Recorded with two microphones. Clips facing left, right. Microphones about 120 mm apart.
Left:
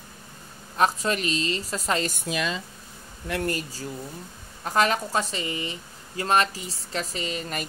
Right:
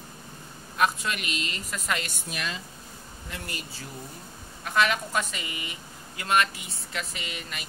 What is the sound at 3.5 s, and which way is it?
Speech, 40° left (ahead or behind).